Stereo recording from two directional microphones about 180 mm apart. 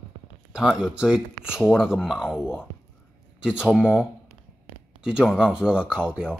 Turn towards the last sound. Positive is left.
turn(degrees=-5)  # may be behind; listen again after turning